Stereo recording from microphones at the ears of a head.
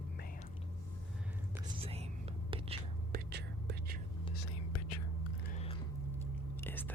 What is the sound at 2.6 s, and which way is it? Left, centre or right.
Whispering, right.